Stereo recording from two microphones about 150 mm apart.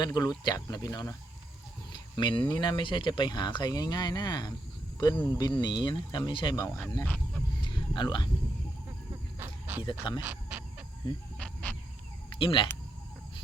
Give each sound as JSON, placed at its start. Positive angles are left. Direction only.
{"t": 0.0, "sound": "speech", "side_deg": 30}
{"t": 2.1, "sound": "speech", "side_deg": 30}
{"t": 6.7, "sound": "speech", "side_deg": 20}
{"t": 7.0, "sound": "speech", "side_deg": 5}
{"t": 7.6, "sound": "a sound", "side_deg": 30}
{"t": 9.4, "sound": "snake", "side_deg": -15}
{"t": 9.8, "sound": "speech", "side_deg": 30}
{"t": 10.2, "sound": "dog", "side_deg": -10}
{"t": 11.3, "sound": "snake", "side_deg": 5}
{"t": 12.3, "sound": "speech", "side_deg": 35}